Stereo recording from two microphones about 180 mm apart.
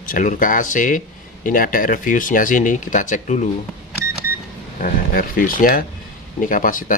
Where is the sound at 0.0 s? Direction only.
50° left (ahead or behind).